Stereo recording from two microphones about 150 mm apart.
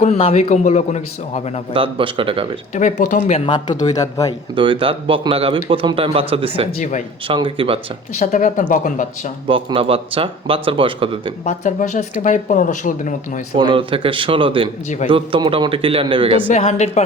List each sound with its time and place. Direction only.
0.0 s speech: 45° left (ahead or behind)
1.7 s a man's voice: 35° right (ahead or behind)
2.7 s speech: 55° left (ahead or behind)
3.4 s speech: 30° left (ahead or behind)
4.5 s a man's voice: 35° right (ahead or behind)
6.7 s speech: 55° left (ahead or behind)
7.3 s a man's voice: 35° right (ahead or behind)
8.2 s speech: 55° left (ahead or behind)
9.5 s a man's voice: 35° right (ahead or behind)
11.4 s speech: 55° left (ahead or behind)
13.6 s a man's voice: 35° right (ahead or behind)
16.5 s speech: 50° left (ahead or behind)